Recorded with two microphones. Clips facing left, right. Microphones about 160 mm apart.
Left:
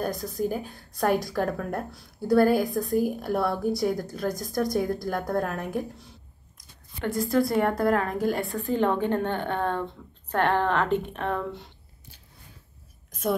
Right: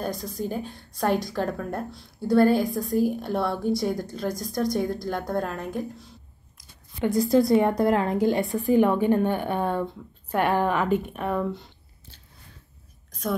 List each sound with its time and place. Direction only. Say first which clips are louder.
0.0 s a woman's voice: left 2 dB; centre (ahead or behind)
7.3 s a woman's voice: right 3 dB; 20° right (ahead or behind); by 11.6 s 5° right (ahead or behind)